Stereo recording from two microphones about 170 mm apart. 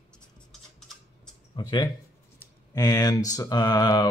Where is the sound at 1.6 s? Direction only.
25° left (ahead or behind).